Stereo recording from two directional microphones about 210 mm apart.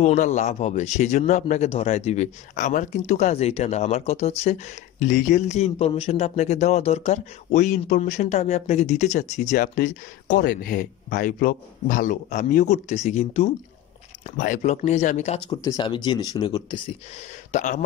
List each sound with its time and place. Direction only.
0.0 s speech: 35° left (ahead or behind)
15.5 s speech: 15° left (ahead or behind)
17.5 s speech: 35° left (ahead or behind)